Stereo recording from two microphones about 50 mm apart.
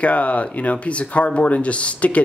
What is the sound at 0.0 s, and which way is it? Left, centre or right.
A man's voice, left.